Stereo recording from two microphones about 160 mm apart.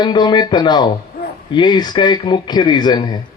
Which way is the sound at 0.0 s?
25° left (ahead or behind).